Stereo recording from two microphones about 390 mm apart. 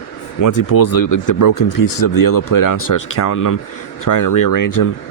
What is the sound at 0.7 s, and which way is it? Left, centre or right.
Speech, left.